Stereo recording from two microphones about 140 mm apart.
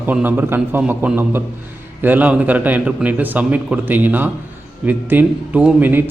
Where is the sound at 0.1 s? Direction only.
15° right (ahead or behind).